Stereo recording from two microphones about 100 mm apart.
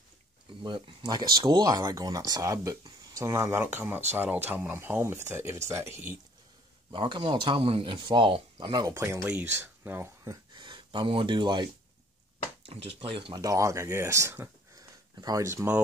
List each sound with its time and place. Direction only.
0.6 s speech: 55° right (ahead or behind)
1.0 s speech: 40° right (ahead or behind); by 6.1 s 25° right (ahead or behind)
6.9 s speech: 55° right (ahead or behind)
8.8 s speech: 30° right (ahead or behind)
10.2 s speech: 45° right (ahead or behind)
12.6 s speech: 75° right (ahead or behind)
13.3 s speech: 35° right (ahead or behind)
14.8 s a sound: 40° right (ahead or behind)
15.4 s speech: 25° right (ahead or behind)